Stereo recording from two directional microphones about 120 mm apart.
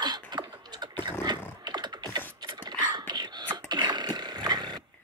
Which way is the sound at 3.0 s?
35° right (ahead or behind).